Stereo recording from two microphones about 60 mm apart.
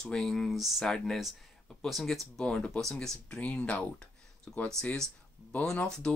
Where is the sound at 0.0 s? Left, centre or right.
Centre.